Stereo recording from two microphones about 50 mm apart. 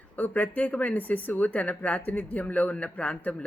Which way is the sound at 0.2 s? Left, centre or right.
Left.